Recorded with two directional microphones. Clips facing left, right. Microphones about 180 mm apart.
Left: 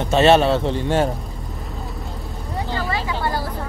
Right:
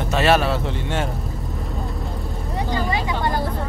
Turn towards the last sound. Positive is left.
turn(degrees=-15)  # may be behind; listen again after turning